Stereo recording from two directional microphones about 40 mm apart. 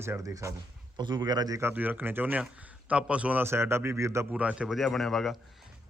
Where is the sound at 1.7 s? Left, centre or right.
Right.